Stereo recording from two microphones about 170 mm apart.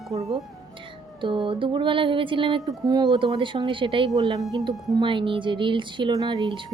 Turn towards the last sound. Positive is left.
turn(degrees=-25)  # may be behind; listen again after turning